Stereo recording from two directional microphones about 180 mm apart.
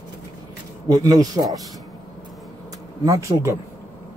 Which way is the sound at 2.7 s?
20° right (ahead or behind).